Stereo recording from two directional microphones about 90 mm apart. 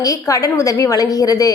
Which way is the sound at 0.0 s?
40° left (ahead or behind).